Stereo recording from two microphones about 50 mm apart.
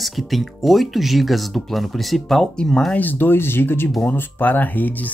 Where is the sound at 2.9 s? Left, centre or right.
Left.